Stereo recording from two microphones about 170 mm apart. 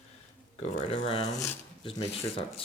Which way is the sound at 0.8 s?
35° left (ahead or behind).